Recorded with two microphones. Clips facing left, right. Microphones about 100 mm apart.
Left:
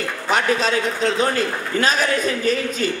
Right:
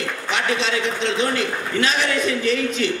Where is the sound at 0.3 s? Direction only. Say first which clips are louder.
Left 4 dB; 40° left (ahead or behind).